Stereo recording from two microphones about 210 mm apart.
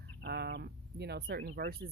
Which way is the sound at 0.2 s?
55° right (ahead or behind).